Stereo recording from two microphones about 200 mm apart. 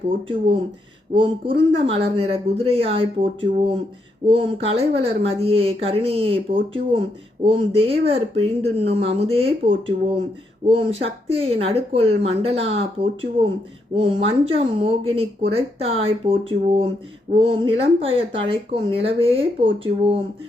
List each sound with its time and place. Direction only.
0.3 s speech: 25° right (ahead or behind)
4.3 s speech: 30° right (ahead or behind)